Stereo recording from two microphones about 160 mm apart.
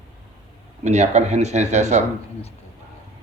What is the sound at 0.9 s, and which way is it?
Speech, 45° right (ahead or behind).